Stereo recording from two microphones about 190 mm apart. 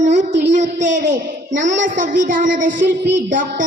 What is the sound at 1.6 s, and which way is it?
Child singing, 40° right (ahead or behind).